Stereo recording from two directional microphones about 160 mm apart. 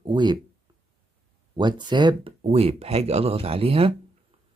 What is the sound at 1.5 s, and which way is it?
Speech, 30° right (ahead or behind).